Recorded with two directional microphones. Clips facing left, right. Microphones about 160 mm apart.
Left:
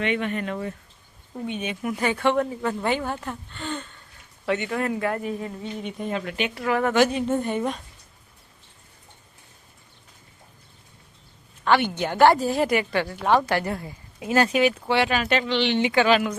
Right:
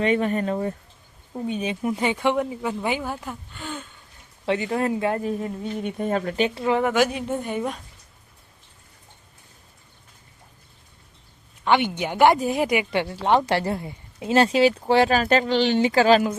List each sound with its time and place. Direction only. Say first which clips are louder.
0.0 s speech: right 4 dB; 35° right (ahead or behind)
1.7 s speech: left 1 dB; 25° right (ahead or behind); by 3.8 s 5° right (ahead or behind)
4.4 s a woman's voice: right 2 dB; 30° right (ahead or behind)
5.8 s speech: right 5 dB; 50° right (ahead or behind)
6.5 s a woman's voice: right 2 dB; 25° right (ahead or behind)
6.8 s speech: left 1 dB; 10° right (ahead or behind)
11.6 s a woman's voice: even; 15° right (ahead or behind); by 16.3 s 35° right (ahead or behind)